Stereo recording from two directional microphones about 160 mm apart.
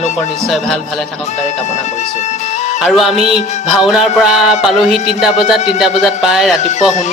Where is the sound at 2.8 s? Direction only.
Centre (ahead or behind).